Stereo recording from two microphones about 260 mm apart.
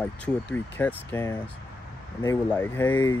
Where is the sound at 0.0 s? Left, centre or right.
Centre.